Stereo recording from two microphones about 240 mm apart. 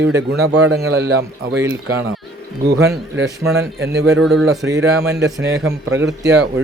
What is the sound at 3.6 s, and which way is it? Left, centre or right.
Speech, right.